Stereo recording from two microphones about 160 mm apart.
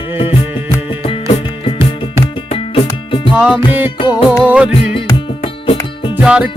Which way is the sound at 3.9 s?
35° left (ahead or behind).